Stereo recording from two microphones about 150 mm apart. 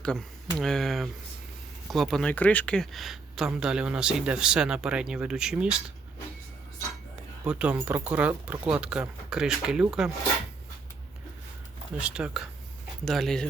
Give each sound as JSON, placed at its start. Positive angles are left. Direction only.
{"t": 0.6, "sound": "speech", "side_deg": 0}
{"t": 7.4, "sound": "speech", "side_deg": -10}
{"t": 11.9, "sound": "speech", "side_deg": -5}